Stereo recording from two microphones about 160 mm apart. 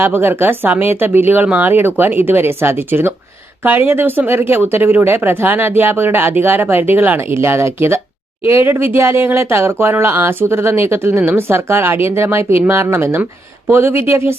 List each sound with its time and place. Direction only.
0.0 s speech: 15° right (ahead or behind)